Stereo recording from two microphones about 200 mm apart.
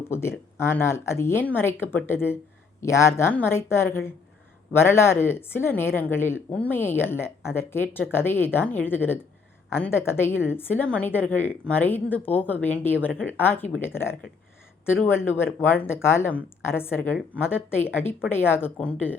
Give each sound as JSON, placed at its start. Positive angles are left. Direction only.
{"t": 0.1, "sound": "speech", "side_deg": 10}